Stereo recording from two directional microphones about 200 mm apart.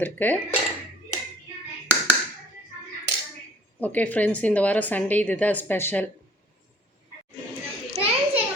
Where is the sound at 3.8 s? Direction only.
5° left (ahead or behind).